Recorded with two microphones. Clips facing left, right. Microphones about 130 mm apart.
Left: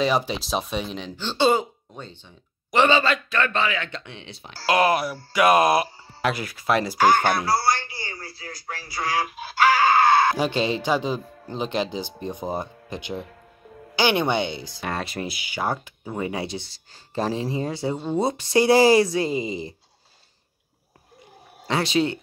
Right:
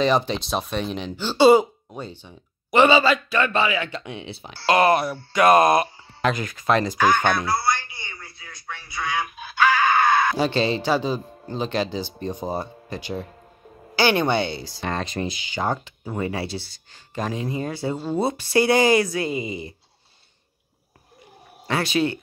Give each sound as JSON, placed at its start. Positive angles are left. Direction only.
{"t": 0.0, "sound": "speech", "side_deg": 5}
{"t": 7.0, "sound": "speech", "side_deg": 30}
{"t": 7.3, "sound": "a sound", "side_deg": 30}
{"t": 8.9, "sound": "speech", "side_deg": 30}
{"t": 10.3, "sound": "speech", "side_deg": 15}
{"t": 17.9, "sound": "speech", "side_deg": -5}
{"t": 18.2, "sound": "speech", "side_deg": 25}
{"t": 21.6, "sound": "speech", "side_deg": 25}